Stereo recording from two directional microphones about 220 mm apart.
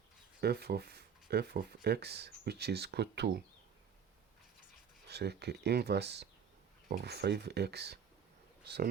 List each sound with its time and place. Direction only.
0.4 s speech: 45° right (ahead or behind)
5.0 s speech: 50° right (ahead or behind)